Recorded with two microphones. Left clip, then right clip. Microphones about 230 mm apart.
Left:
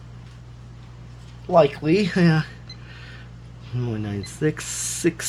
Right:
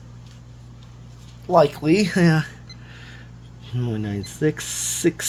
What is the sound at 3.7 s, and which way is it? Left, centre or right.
Speech, centre.